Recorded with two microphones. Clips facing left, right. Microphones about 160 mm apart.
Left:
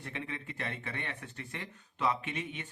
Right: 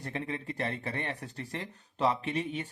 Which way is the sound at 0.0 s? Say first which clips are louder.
Right 5 dB; 35° right (ahead or behind).